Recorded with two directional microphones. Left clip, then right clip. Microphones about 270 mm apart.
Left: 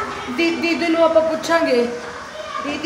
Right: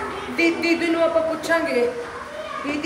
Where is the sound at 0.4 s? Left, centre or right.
Centre.